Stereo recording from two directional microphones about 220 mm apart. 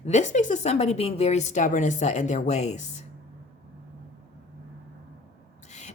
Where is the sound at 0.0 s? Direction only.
30° left (ahead or behind).